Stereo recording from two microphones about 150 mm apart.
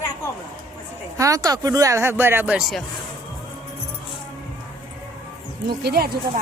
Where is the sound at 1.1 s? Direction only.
20° right (ahead or behind).